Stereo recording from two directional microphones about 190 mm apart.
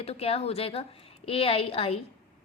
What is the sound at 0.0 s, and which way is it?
A woman's voice, 30° left (ahead or behind).